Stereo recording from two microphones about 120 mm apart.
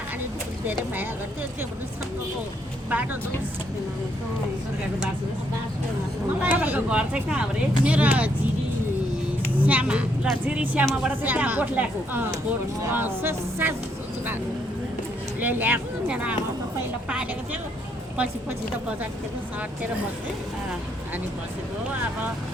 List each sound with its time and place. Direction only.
2.9 s speech: 15° right (ahead or behind)
6.4 s speech: 15° right (ahead or behind)
9.6 s speech: 10° right (ahead or behind)
15.4 s speech: 15° right (ahead or behind)